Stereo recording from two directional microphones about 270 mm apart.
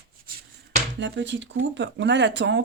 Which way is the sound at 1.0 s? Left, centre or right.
Right.